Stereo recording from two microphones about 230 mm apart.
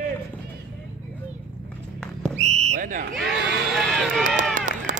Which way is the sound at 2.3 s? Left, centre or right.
Right.